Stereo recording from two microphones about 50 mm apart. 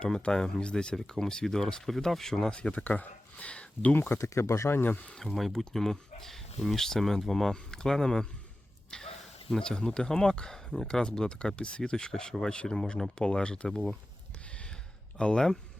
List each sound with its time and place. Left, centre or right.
0.0 s speech: centre
0.9 s speech: centre
2.5 s speech: left
2.8 s speech: left
3.9 s speech: left
4.2 s speech: left
4.7 s speech: left
5.1 s speech: centre
14.5 s a sound: left
15.2 s speech: centre